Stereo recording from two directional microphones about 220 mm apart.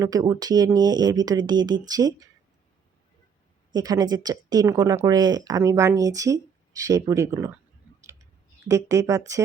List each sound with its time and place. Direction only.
0.0 s speech: 15° right (ahead or behind)
3.8 s speech: 15° right (ahead or behind)
8.0 s clicking: 15° right (ahead or behind)